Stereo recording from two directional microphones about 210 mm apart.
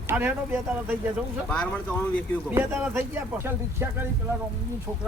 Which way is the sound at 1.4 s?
5° left (ahead or behind).